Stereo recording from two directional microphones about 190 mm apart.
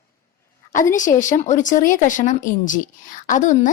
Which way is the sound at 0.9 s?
40° left (ahead or behind).